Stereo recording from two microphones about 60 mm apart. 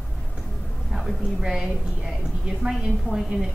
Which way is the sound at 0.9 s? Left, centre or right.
Centre.